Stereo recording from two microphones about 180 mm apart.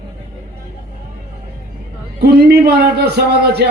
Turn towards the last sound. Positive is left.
turn(degrees=-65)  # may be behind; listen again after turning